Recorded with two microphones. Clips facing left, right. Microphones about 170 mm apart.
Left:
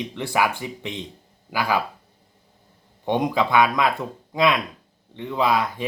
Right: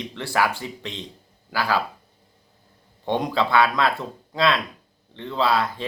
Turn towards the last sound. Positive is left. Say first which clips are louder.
# left 1 dB
turn(degrees=15)  # may be behind; listen again after turning